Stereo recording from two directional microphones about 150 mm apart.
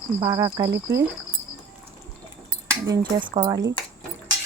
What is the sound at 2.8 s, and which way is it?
Speech, 25° right (ahead or behind).